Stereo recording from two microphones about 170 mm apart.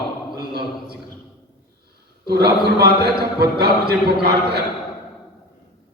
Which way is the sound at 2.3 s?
70° right (ahead or behind).